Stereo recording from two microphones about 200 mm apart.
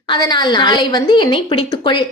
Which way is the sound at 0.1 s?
20° left (ahead or behind).